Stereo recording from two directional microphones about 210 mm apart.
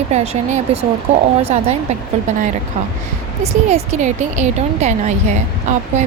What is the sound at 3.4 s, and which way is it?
A woman's voice, 30° right (ahead or behind).